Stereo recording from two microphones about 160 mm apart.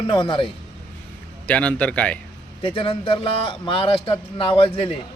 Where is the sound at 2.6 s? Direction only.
35° left (ahead or behind).